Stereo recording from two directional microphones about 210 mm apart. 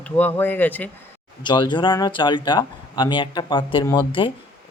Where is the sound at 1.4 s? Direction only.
20° left (ahead or behind).